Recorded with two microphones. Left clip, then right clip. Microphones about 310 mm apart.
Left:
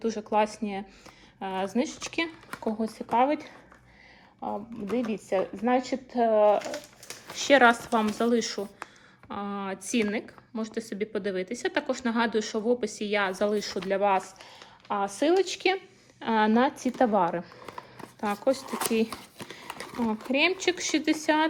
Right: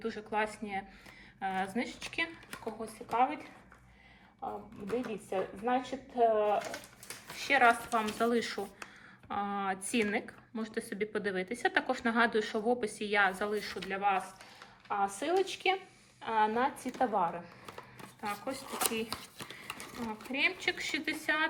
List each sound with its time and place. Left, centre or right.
0.0 s speech: centre
5.0 s a woman's voice: left
14.8 s speech: left
18.8 s speech: centre